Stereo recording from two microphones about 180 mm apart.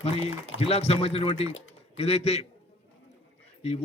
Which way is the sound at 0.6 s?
35° left (ahead or behind).